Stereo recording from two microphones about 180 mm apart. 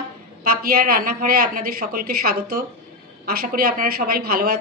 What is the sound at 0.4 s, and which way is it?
A woman's voice, 55° right (ahead or behind).